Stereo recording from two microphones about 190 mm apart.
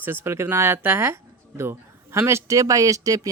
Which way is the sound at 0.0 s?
10° right (ahead or behind).